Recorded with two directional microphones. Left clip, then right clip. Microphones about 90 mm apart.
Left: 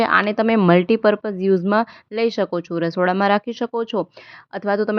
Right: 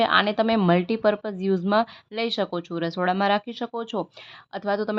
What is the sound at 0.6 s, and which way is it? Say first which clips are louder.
Speech: left 6 dB; 50° left (ahead or behind).